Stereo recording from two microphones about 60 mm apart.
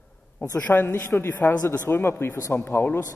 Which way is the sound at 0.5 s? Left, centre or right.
Left.